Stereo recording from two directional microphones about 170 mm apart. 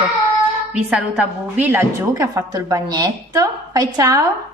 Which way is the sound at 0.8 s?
5° right (ahead or behind).